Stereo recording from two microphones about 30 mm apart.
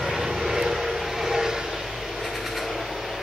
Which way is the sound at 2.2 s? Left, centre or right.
Centre.